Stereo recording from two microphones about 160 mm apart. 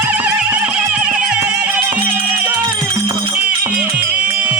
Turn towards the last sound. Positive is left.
turn(degrees=-10)  # may be behind; listen again after turning